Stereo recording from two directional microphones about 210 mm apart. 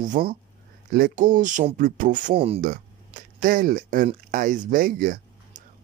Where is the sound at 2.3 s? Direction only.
30° right (ahead or behind).